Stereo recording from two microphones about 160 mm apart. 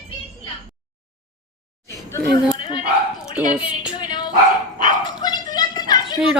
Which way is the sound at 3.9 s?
30° left (ahead or behind).